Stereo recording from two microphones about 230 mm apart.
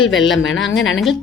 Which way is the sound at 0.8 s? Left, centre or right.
Left.